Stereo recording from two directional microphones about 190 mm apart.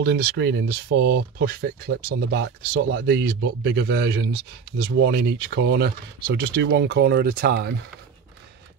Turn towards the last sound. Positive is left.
turn(degrees=-55)  # may be behind; listen again after turning